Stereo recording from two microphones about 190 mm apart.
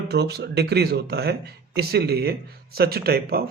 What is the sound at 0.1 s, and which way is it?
Speech, 60° right (ahead or behind).